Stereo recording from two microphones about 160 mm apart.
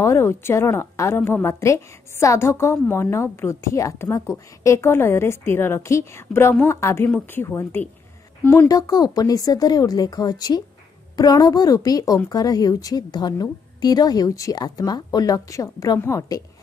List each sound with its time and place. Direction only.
0.0 s a woman's voice: 15° left (ahead or behind)